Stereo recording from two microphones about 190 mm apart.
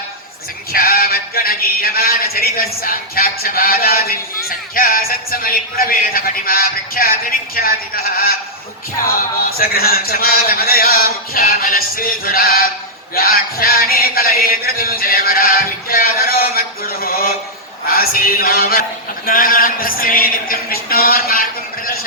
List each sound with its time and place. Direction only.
0.7 s speech: 50° left (ahead or behind)